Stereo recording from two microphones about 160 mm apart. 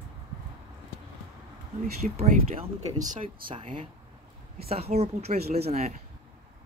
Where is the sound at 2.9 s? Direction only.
50° right (ahead or behind).